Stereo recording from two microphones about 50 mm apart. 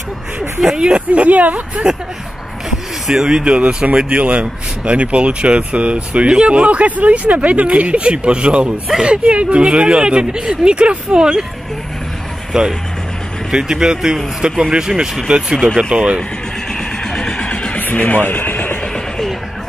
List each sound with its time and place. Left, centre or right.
0.7 s speech: right
3.1 s speech: centre
12.5 s speech: centre
17.1 s vehicle: centre
17.7 s a sound: left